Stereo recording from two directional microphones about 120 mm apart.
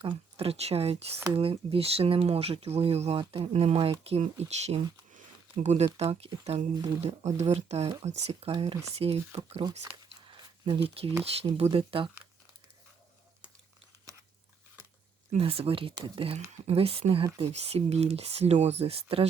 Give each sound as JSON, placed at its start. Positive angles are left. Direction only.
{"t": 0.0, "sound": "speech", "side_deg": -50}
{"t": 4.4, "sound": "speech", "side_deg": -70}
{"t": 9.9, "sound": "zipper", "side_deg": -50}
{"t": 11.2, "sound": "speech", "side_deg": -55}
{"t": 15.3, "sound": "speech", "side_deg": -55}